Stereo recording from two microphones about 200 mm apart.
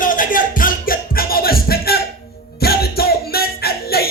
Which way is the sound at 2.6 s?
50° left (ahead or behind).